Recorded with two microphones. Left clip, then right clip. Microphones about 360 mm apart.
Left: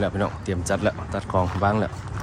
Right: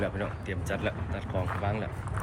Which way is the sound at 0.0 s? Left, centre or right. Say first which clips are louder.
Left 7 dB; centre.